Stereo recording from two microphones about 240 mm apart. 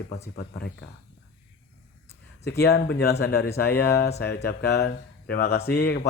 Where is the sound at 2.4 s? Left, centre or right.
Left.